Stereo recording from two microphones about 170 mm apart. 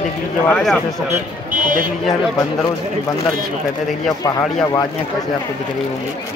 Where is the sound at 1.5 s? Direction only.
50° right (ahead or behind).